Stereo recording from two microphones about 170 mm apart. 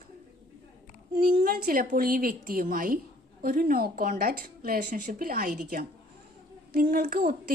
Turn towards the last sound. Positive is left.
turn(degrees=-60)  # may be behind; listen again after turning